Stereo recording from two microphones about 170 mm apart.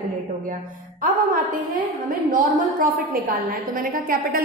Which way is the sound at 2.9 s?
55° right (ahead or behind).